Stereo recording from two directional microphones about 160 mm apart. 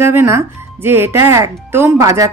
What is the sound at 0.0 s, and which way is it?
Speech, 15° right (ahead or behind).